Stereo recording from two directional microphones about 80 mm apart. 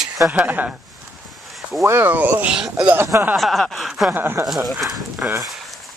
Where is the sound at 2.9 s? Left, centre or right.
Right.